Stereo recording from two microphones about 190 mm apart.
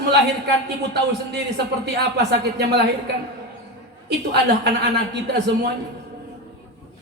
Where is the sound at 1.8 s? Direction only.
65° right (ahead or behind).